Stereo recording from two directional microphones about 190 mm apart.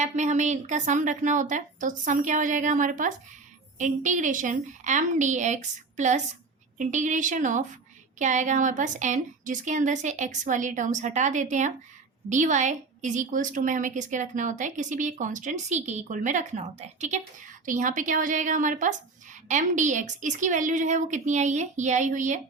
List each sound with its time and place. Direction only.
0.0 s a woman's voice: 40° right (ahead or behind)